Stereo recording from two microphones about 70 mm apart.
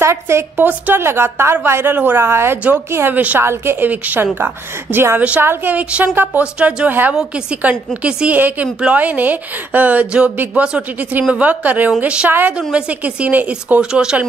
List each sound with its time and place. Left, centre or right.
0.0 s a woman's voice: right
0.6 s a woman's voice: right
3.9 s a woman's voice: right
6.4 s a woman's voice: centre
6.9 s a woman's voice: right
10.6 s a woman's voice: centre
12.3 s a woman's voice: right
12.5 s a woman's voice: centre